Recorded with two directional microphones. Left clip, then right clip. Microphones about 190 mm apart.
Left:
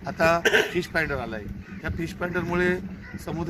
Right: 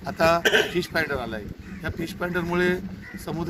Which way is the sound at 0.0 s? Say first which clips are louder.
Right 1 dB; 10° left (ahead or behind).